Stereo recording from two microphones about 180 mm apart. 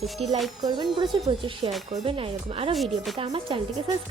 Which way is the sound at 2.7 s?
Centre (ahead or behind).